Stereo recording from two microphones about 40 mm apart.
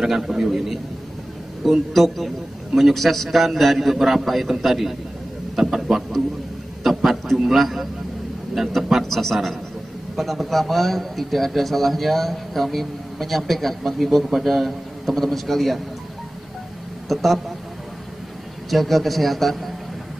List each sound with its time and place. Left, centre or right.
0.0 s a man's voice: centre
17.1 s a man's voice: centre
18.7 s a man's voice: centre